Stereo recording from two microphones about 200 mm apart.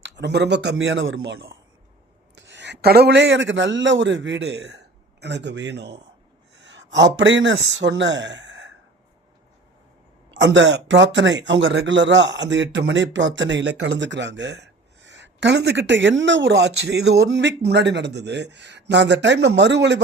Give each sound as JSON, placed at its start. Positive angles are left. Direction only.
{"t": 0.0, "sound": "speech", "side_deg": -60}
{"t": 6.6, "sound": "a sound", "side_deg": -65}
{"t": 7.8, "sound": "speech", "side_deg": -65}
{"t": 10.4, "sound": "speech", "side_deg": -65}